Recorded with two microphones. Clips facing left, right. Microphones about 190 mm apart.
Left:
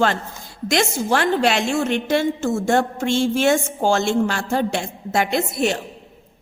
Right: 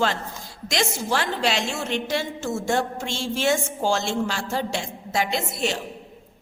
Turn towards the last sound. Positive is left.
turn(degrees=55)  # may be behind; listen again after turning